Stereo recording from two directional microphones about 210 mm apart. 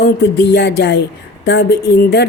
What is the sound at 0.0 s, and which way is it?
A woman's voice, 50° left (ahead or behind).